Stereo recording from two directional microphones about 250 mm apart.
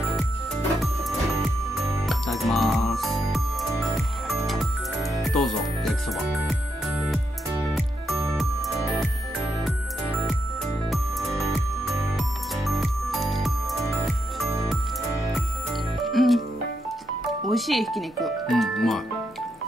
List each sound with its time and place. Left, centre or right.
2.0 s music: centre
5.1 s music: centre
7.7 s music: centre
10.9 s music: centre
16.0 s music: centre
17.5 s speech: centre